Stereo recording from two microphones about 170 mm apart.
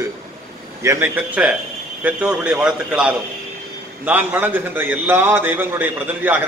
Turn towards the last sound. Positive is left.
turn(degrees=-10)  # may be behind; listen again after turning